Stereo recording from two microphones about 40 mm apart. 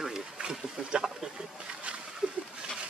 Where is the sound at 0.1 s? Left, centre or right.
Right.